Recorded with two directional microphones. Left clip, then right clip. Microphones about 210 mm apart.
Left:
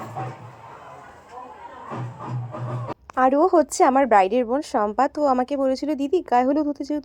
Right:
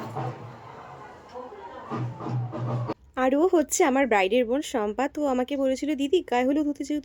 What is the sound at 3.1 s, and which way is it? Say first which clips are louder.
Speech: left 5 dB; 5° right (ahead or behind).